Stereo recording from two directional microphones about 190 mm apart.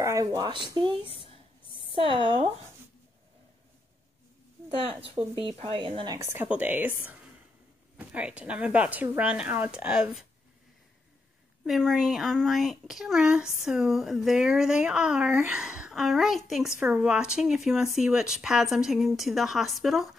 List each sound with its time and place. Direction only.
0.0 s a woman's voice: 15° right (ahead or behind)
4.8 s a woman's voice: 30° right (ahead or behind)
6.1 s a woman's voice: 10° right (ahead or behind)
11.6 s speech: centre (ahead or behind)